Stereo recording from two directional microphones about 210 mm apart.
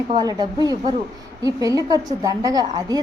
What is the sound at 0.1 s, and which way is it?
A woman's voice, 20° right (ahead or behind).